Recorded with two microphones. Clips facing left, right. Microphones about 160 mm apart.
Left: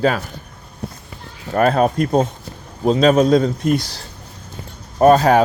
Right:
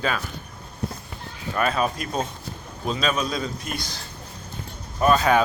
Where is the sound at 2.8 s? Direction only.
75° left (ahead or behind).